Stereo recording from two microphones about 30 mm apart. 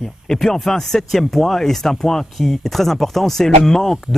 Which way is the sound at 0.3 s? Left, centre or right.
Centre.